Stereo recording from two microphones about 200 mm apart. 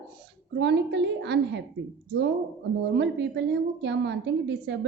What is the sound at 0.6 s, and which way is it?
A woman's voice, 60° right (ahead or behind).